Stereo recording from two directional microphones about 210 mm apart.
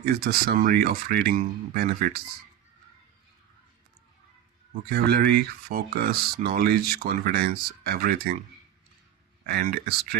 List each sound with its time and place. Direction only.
0.0 s speech: 45° right (ahead or behind)
4.9 s speech: 50° right (ahead or behind)
9.5 s speech: 45° right (ahead or behind)